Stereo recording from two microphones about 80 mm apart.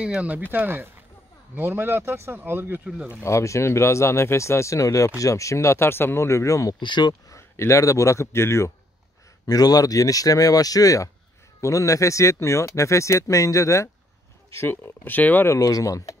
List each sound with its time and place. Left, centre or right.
0.0 s speech: centre
0.5 s speech: right
2.8 s speech: centre
3.2 s speech: left
6.8 s speech: left
7.2 s speech: left
9.5 s speech: left
14.5 s speech: left
15.6 s speech: left